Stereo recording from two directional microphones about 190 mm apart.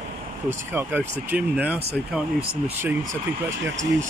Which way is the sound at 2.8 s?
15° right (ahead or behind).